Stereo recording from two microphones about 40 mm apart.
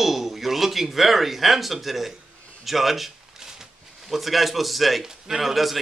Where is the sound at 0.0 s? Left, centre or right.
Centre.